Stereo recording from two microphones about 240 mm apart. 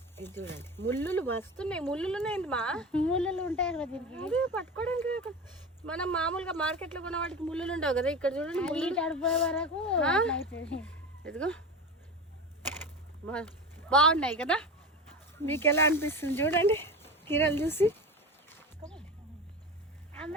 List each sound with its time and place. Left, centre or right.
0.2 s speech: centre
10.4 s speech: left
10.8 s speech: centre
13.2 s a woman's voice: centre